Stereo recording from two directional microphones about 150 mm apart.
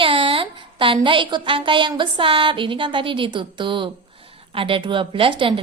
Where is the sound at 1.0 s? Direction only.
35° right (ahead or behind).